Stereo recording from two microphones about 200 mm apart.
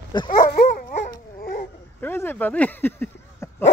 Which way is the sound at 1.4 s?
50° left (ahead or behind).